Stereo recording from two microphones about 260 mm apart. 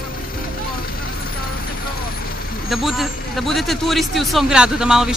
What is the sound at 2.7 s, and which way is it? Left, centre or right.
Speech, centre.